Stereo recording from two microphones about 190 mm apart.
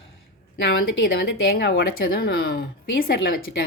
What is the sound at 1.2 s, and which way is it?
A woman's voice, 55° left (ahead or behind).